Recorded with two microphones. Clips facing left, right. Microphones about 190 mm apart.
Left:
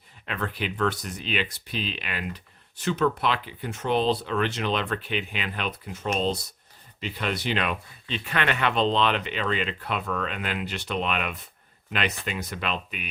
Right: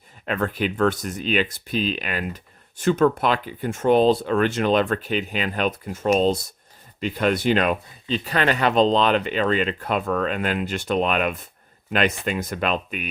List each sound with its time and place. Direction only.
0.3 s speech: 45° right (ahead or behind)